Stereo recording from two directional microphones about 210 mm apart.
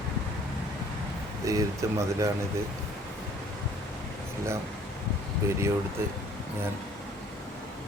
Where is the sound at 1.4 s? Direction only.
15° right (ahead or behind).